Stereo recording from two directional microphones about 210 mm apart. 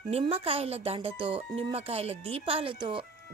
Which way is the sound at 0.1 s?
30° right (ahead or behind).